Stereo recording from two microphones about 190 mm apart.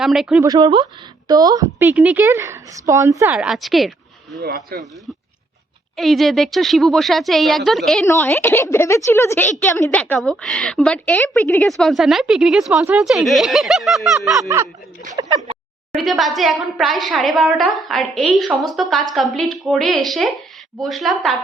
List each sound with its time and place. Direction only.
0.0 s a woman's voice: centre (ahead or behind)
0.4 s a woman's voice: 20° right (ahead or behind)
3.3 s speech: 5° right (ahead or behind)
4.4 s speech: 60° right (ahead or behind)
6.0 s a woman's voice: centre (ahead or behind)
8.0 s a woman's voice: 15° left (ahead or behind)
11.8 s a woman's voice: centre (ahead or behind)
14.3 s a woman's voice: 15° right (ahead or behind)
15.1 s a sound: 20° right (ahead or behind)
15.9 s a woman's voice: centre (ahead or behind)